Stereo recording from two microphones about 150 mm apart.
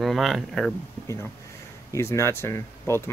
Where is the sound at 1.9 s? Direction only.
20° left (ahead or behind).